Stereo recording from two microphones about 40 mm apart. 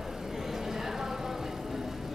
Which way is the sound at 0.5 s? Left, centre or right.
Centre.